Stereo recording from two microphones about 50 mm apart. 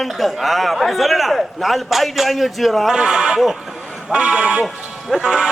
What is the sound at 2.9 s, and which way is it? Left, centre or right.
Speech, centre.